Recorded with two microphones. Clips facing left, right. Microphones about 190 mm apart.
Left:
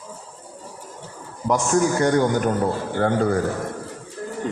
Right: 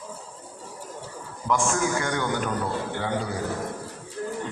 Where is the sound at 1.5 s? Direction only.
40° left (ahead or behind).